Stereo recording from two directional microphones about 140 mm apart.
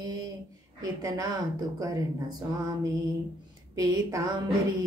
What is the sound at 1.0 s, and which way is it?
Female singing, 25° right (ahead or behind).